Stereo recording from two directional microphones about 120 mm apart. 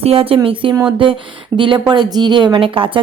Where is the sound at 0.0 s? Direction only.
55° right (ahead or behind).